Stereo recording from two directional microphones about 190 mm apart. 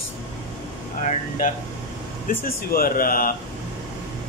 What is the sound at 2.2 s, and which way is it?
Speech, 50° left (ahead or behind).